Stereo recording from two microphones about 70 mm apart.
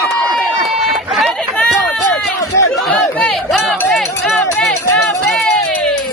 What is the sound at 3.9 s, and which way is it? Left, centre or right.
Run, centre.